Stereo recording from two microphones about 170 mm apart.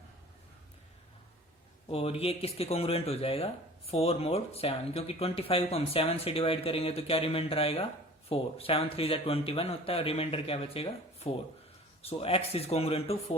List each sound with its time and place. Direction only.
1.9 s speech: 35° left (ahead or behind)